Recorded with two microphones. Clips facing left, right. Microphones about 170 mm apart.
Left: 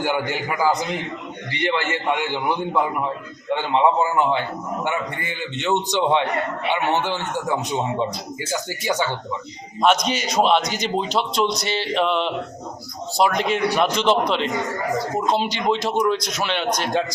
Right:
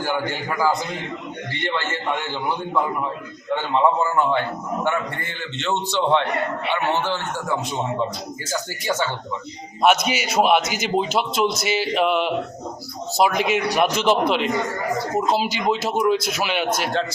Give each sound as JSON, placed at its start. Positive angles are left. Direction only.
{"t": 0.0, "sound": "a man's voice", "side_deg": 15}
{"t": 9.8, "sound": "a man's voice", "side_deg": -10}